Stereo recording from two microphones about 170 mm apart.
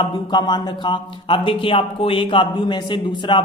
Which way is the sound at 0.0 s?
25° left (ahead or behind).